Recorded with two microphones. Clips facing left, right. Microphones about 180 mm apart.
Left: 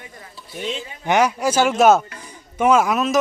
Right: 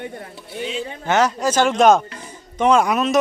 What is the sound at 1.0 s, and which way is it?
A man's voice, 10° left (ahead or behind).